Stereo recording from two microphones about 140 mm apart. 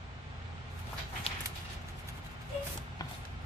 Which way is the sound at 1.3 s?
45° left (ahead or behind).